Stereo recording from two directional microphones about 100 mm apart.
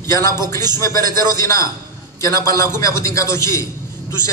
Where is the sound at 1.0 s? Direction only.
40° right (ahead or behind).